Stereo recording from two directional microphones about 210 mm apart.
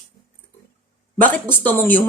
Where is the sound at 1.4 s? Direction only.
10° left (ahead or behind).